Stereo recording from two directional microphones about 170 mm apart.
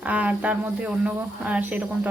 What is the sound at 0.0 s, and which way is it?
A man's voice, 10° right (ahead or behind).